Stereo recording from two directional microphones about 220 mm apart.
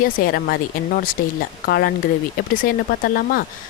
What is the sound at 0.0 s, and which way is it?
Speech, 45° left (ahead or behind).